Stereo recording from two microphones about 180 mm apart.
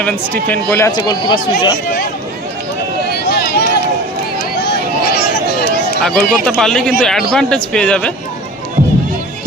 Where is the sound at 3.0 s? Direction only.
65° left (ahead or behind).